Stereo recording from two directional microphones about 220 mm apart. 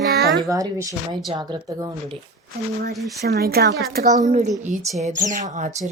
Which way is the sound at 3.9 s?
35° right (ahead or behind).